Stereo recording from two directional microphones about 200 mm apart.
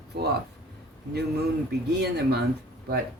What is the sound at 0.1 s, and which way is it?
Speech, 55° right (ahead or behind).